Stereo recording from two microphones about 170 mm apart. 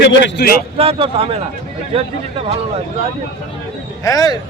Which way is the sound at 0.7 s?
35° right (ahead or behind).